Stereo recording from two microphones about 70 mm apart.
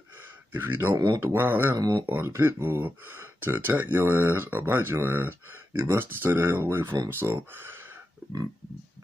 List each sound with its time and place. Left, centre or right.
0.5 s speech: right
0.9 s speech: right
1.2 s speech: right
1.8 s speech: right
2.0 s speech: right